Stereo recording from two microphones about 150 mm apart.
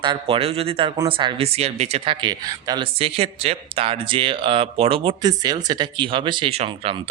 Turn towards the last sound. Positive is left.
turn(degrees=-35)  # may be behind; listen again after turning